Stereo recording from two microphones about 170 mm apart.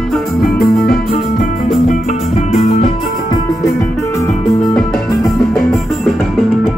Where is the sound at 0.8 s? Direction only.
65° left (ahead or behind); by 2.6 s 45° left (ahead or behind).